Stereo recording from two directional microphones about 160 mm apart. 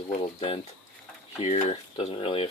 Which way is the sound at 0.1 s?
40° left (ahead or behind).